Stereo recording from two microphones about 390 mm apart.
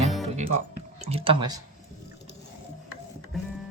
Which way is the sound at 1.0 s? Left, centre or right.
Centre.